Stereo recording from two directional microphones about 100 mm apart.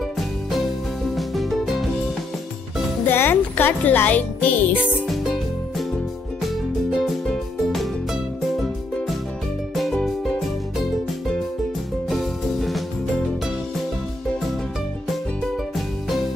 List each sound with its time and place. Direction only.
1.1 s music: centre (ahead or behind)
3.1 s speech: 20° left (ahead or behind)
5.0 s music: centre (ahead or behind)
6.9 s music: centre (ahead or behind)
9.8 s music: centre (ahead or behind)
12.1 s music: centre (ahead or behind)